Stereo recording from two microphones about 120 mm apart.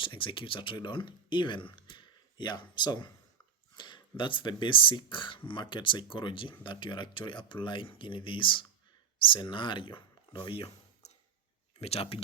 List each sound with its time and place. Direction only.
0.0 s speech: 45° left (ahead or behind)